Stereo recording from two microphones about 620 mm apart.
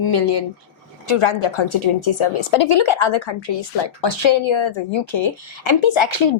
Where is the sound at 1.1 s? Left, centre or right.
Left.